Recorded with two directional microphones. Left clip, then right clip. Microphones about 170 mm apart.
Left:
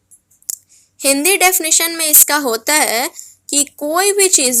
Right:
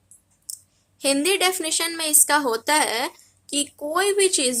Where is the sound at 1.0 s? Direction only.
25° left (ahead or behind).